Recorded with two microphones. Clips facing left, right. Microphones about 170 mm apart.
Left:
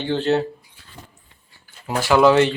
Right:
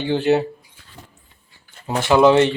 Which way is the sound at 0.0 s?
10° right (ahead or behind).